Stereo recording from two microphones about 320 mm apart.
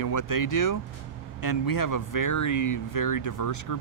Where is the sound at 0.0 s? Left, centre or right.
Left.